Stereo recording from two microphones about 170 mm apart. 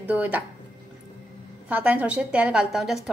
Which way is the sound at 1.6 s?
10° right (ahead or behind).